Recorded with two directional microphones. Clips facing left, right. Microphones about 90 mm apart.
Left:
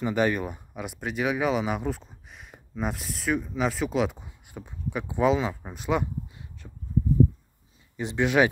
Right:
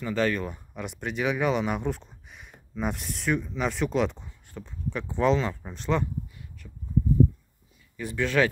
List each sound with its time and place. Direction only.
0.0 s speech: 15° left (ahead or behind)
6.6 s a sound: 40° left (ahead or behind)
8.0 s speech: 20° left (ahead or behind)